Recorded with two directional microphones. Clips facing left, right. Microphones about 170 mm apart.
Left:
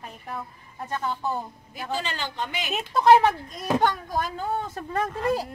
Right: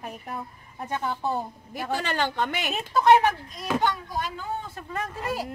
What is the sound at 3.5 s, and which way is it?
Speech, 50° left (ahead or behind).